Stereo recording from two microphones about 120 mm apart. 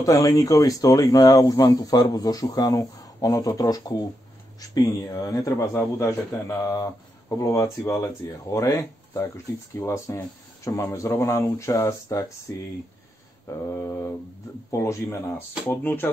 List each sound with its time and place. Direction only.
0.0 s speech: 30° left (ahead or behind)